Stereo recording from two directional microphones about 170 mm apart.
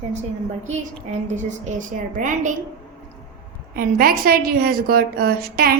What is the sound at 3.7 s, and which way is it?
A woman's voice, 60° right (ahead or behind).